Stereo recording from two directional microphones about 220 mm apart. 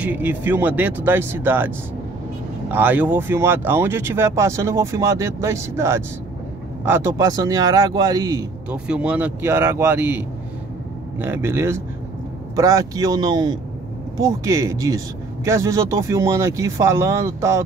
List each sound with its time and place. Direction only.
0.0 s speech: 5° right (ahead or behind)
2.7 s speech: 10° right (ahead or behind)
8.6 s speech: 5° right (ahead or behind)